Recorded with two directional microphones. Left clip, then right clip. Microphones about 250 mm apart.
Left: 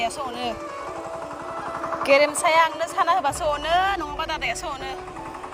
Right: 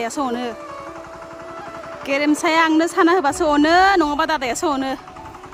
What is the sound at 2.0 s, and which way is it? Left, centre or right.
Speech, centre.